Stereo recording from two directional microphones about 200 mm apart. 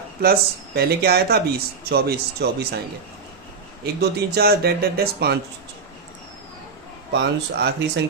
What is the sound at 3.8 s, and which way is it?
Speech, 55° right (ahead or behind).